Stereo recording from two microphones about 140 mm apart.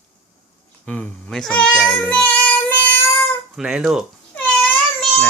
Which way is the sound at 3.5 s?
Centre (ahead or behind).